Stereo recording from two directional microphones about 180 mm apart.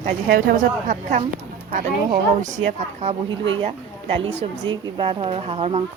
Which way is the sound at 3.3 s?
30° right (ahead or behind).